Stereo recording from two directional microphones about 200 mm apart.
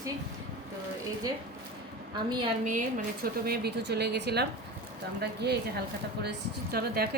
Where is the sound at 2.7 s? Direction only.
40° right (ahead or behind).